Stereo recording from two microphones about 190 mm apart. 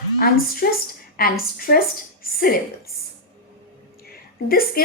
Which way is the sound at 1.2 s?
50° left (ahead or behind).